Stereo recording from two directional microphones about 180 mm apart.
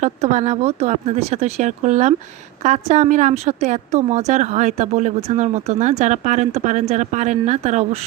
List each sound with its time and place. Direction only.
0.0 s a woman's voice: 40° right (ahead or behind)